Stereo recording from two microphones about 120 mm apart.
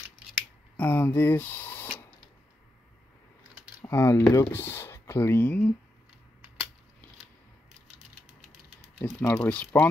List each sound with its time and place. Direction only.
0.7 s speech: 15° left (ahead or behind)
3.8 s speech: 20° left (ahead or behind)
9.2 s speech: 10° left (ahead or behind)